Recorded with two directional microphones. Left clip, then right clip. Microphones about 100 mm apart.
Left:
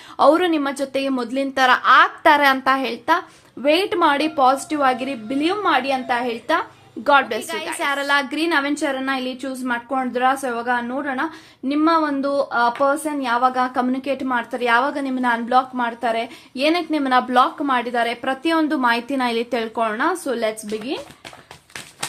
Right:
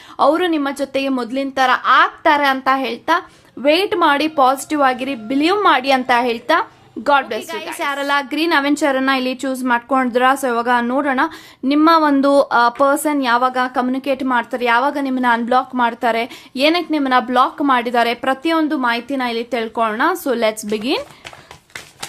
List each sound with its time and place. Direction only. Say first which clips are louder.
0.2 s a woman's voice: even; 10° right (ahead or behind)
1.4 s a woman's voice: even; 10° right (ahead or behind)
2.7 s a woman's voice: right 2 dB; 15° right (ahead or behind)
4.4 s a woman's voice: right 3 dB; 30° right (ahead or behind)
5.3 s a woman's voice: right 5 dB; 35° right (ahead or behind)
5.5 s a woman's voice: right 6 dB; 55° right (ahead or behind); by 8.7 s 35° right (ahead or behind)
8.7 s a woman's voice: right 6 dB; 50° right (ahead or behind)
11.7 s speech: right 6 dB; 50° right (ahead or behind); by 13.0 s 70° right (ahead or behind)
13.1 s a woman's voice: right 4 dB; 35° right (ahead or behind)
18.4 s a woman's voice: right 1 dB; 20° right (ahead or behind)
18.7 s a woman's voice: right 1 dB; 5° right (ahead or behind)
19.7 s a woman's voice: right 5 dB; 30° right (ahead or behind)
20.2 s a woman's voice: right 5 dB; 45° right (ahead or behind)